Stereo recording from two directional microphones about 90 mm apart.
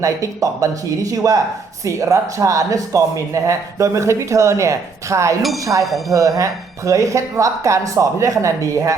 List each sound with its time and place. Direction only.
0.0 s speech: 40° right (ahead or behind)
5.8 s speech: centre (ahead or behind)
6.1 s speech: 40° right (ahead or behind)